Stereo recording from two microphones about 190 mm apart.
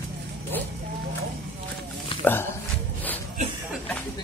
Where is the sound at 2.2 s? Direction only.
10° left (ahead or behind).